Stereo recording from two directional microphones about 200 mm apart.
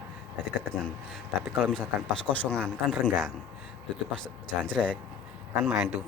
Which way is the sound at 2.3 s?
5° left (ahead or behind).